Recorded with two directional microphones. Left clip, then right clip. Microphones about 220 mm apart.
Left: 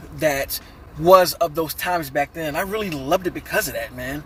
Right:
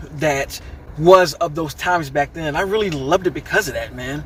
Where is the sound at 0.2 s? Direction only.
20° left (ahead or behind).